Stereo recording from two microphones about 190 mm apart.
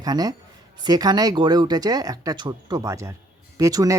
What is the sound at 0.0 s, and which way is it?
A man's voice, 20° right (ahead or behind).